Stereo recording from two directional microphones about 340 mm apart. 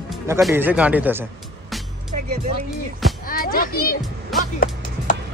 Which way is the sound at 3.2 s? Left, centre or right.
Left.